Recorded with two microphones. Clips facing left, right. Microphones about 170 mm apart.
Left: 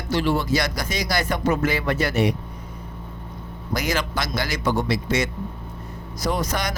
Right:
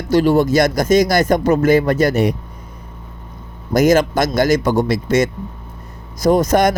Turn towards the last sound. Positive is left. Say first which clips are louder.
# right 12 dB
turn(degrees=-50)  # may be behind; listen again after turning